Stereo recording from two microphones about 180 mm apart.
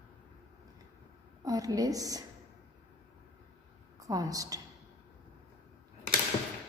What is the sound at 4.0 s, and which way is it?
Speech, 20° right (ahead or behind).